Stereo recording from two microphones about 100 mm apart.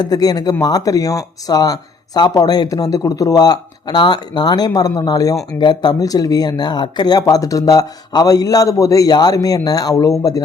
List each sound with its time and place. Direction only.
0.0 s speech: 40° left (ahead or behind)